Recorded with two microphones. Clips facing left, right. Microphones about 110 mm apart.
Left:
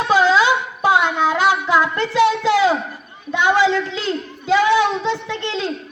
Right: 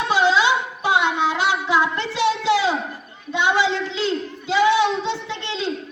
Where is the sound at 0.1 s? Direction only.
45° left (ahead or behind).